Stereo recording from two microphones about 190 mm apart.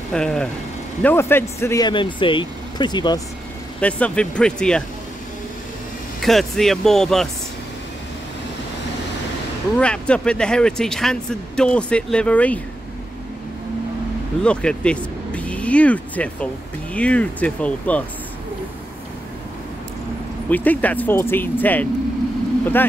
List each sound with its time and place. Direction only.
0.1 s speech: 5° left (ahead or behind); by 3.2 s 25° left (ahead or behind)
3.8 s speech: 5° left (ahead or behind)
6.2 s speech: centre (ahead or behind)
9.8 s speech: 5° left (ahead or behind)
14.4 s speech: 5° left (ahead or behind)
20.4 s speech: 10° left (ahead or behind)